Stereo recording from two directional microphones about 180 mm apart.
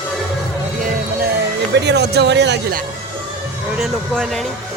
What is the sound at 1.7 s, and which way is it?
Speech, 70° right (ahead or behind).